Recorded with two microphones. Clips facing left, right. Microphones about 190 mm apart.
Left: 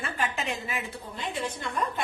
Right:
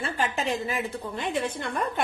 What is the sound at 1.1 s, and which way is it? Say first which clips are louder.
Speech: right 4 dB; 55° right (ahead or behind).